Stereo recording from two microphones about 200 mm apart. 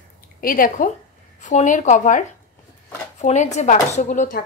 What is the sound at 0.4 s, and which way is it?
A woman's voice, 45° left (ahead or behind).